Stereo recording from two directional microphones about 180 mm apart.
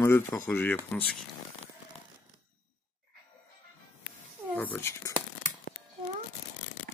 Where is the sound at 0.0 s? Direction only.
15° left (ahead or behind).